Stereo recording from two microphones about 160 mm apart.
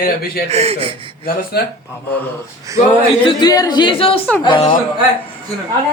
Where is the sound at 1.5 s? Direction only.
80° left.